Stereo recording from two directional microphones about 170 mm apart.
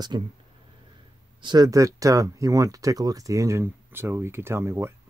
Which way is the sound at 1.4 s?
25° right (ahead or behind).